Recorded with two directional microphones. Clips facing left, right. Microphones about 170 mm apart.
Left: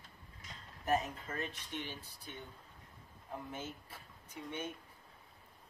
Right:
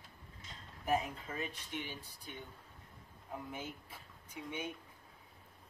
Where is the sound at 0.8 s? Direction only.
10° right (ahead or behind).